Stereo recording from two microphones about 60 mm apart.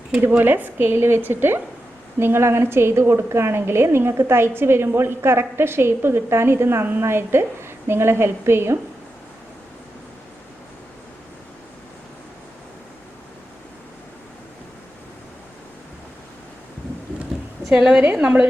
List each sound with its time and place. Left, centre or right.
0.2 s a woman's voice: right
17.7 s a woman's voice: centre